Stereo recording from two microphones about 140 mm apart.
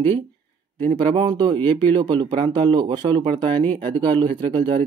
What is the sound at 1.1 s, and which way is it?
Speech, 35° right (ahead or behind).